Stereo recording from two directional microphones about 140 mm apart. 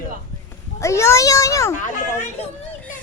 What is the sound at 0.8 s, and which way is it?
Speech, 20° left (ahead or behind).